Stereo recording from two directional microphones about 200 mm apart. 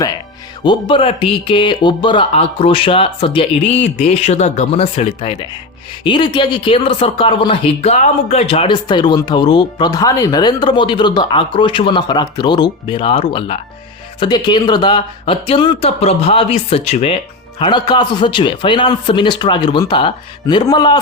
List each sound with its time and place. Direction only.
0.6 s speech: 25° left (ahead or behind)